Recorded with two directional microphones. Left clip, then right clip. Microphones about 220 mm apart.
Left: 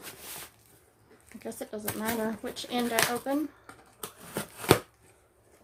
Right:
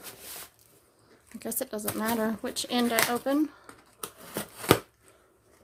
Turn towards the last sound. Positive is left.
turn(degrees=-10)  # may be behind; listen again after turning